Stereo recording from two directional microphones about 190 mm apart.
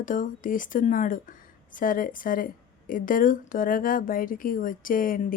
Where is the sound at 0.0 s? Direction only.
45° left (ahead or behind).